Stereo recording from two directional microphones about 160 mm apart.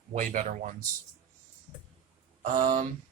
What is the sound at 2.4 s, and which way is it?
Speech, 55° right (ahead or behind).